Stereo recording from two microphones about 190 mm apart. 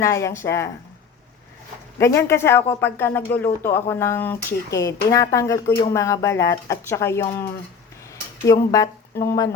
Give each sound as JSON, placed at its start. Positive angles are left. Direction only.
{"t": 0.0, "sound": "speech", "side_deg": 15}
{"t": 2.0, "sound": "speech", "side_deg": 15}
{"t": 8.7, "sound": "speech", "side_deg": 15}